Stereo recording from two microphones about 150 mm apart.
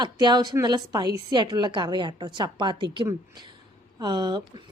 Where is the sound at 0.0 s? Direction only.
30° right (ahead or behind).